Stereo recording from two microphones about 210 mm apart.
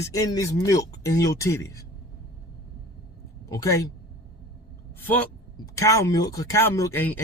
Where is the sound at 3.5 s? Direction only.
15° left (ahead or behind).